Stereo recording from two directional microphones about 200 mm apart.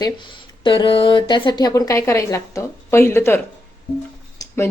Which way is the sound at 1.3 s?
20° left (ahead or behind).